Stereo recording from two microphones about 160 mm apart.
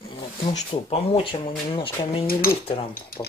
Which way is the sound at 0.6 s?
35° left (ahead or behind).